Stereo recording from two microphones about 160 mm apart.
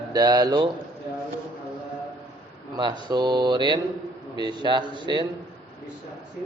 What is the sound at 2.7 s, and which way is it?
Speech, 25° right (ahead or behind).